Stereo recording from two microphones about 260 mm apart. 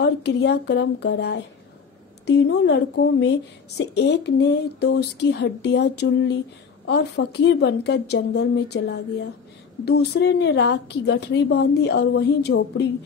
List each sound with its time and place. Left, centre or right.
0.0 s a woman's voice: left